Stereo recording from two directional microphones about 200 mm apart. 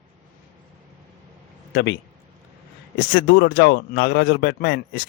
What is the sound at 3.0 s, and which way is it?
Speech, 55° left (ahead or behind).